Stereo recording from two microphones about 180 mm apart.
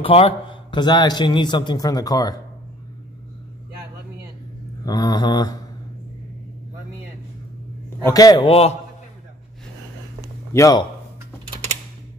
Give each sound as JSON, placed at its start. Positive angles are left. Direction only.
{"t": 0.0, "sound": "a man's voice", "side_deg": 30}
{"t": 4.8, "sound": "a man's voice", "side_deg": 20}
{"t": 8.0, "sound": "a man's voice", "side_deg": 20}
{"t": 8.5, "sound": "a man's voice", "side_deg": 35}
{"t": 10.5, "sound": "a man's voice", "side_deg": 20}